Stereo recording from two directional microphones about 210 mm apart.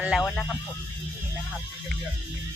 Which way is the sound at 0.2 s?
5° left (ahead or behind).